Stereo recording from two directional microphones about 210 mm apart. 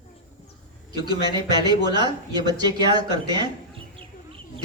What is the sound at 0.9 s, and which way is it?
A man's voice, 20° right (ahead or behind).